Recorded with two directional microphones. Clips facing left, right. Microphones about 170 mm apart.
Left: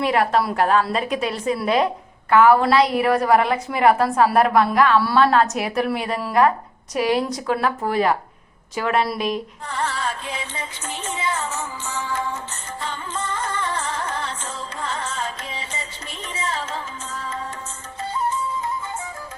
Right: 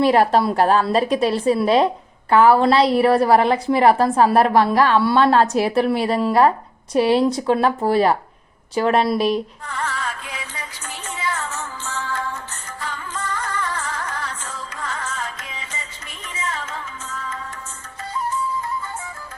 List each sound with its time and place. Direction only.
0.0 s a woman's voice: 35° right (ahead or behind)
9.6 s music: 30° left (ahead or behind)